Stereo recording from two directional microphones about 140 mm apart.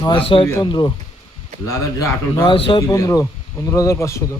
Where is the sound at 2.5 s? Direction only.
40° left (ahead or behind).